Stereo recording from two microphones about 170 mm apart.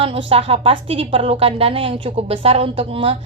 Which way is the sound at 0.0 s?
30° right (ahead or behind).